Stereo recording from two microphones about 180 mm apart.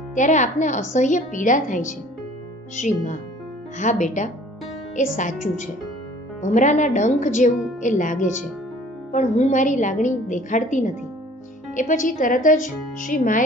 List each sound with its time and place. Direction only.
0.1 s a woman's voice: 45° left (ahead or behind)
6.4 s a woman's voice: 45° left (ahead or behind)